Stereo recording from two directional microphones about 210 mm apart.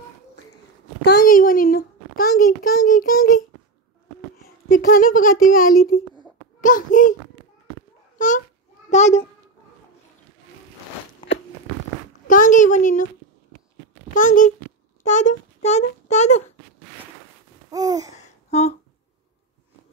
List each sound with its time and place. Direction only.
1.0 s a child's voice: 45° left (ahead or behind)
4.9 s a child's voice: 40° left (ahead or behind)
8.9 s a child's voice: 35° left (ahead or behind)
12.3 s a child's voice: 40° left (ahead or behind)
14.1 s a child's voice: 40° left (ahead or behind)
17.6 s babbling: 15° right (ahead or behind)
18.1 s a sound: 30° left (ahead or behind)